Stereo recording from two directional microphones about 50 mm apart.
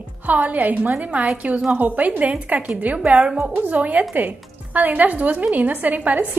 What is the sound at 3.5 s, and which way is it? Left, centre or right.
A woman's voice, right.